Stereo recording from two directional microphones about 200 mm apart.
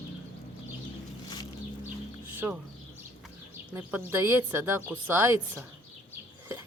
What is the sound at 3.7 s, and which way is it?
Speech, 10° right (ahead or behind).